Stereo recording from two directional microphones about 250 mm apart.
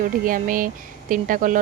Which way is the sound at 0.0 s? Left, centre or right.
Right.